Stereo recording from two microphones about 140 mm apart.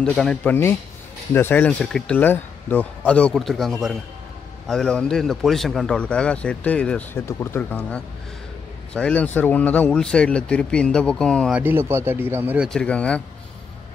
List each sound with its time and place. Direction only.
0.0 s speech: 5° left (ahead or behind)
11.5 s speech: 15° right (ahead or behind)
12.5 s speech: 5° left (ahead or behind)